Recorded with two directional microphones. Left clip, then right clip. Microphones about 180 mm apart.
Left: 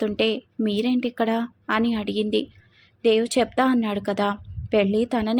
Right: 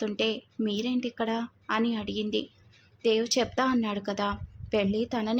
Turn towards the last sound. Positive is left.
turn(degrees=20)  # may be behind; listen again after turning